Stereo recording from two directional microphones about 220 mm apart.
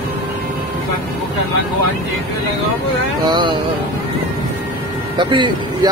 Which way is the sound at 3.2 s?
20° right (ahead or behind).